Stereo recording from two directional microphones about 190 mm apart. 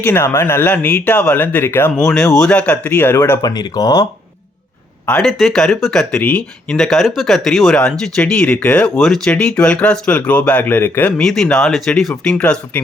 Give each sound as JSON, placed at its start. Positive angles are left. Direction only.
{"t": 0.0, "sound": "speech", "side_deg": 10}
{"t": 5.0, "sound": "speech", "side_deg": 5}